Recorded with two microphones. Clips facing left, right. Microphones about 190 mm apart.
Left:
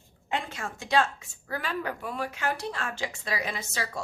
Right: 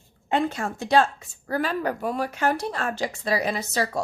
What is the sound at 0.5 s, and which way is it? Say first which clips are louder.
A woman's voice: right 2 dB; 35° right (ahead or behind).